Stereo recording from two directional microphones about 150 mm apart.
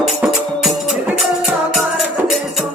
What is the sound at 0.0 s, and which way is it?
Music, 5° right (ahead or behind).